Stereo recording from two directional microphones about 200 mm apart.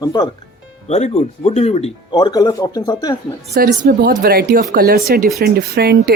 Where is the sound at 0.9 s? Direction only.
35° left (ahead or behind).